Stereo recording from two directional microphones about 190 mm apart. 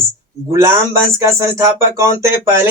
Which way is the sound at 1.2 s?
15° right (ahead or behind).